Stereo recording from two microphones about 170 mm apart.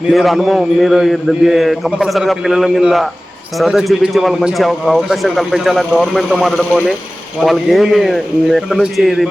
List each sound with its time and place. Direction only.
0.1 s speech: centre (ahead or behind)